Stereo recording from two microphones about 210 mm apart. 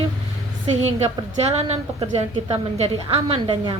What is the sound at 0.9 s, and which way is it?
A woman's voice, 30° right (ahead or behind).